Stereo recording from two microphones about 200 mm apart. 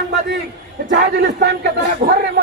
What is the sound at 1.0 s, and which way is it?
Speech, 50° right (ahead or behind).